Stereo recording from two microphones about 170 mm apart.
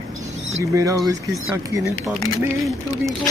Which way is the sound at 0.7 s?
20° right (ahead or behind).